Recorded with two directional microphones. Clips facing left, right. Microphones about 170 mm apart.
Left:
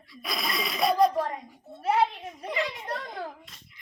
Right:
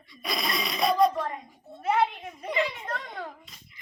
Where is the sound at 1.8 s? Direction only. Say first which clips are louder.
Even; 35° left (ahead or behind).